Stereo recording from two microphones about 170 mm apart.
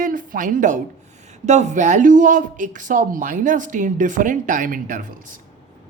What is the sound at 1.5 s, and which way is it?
Speech, 45° right (ahead or behind).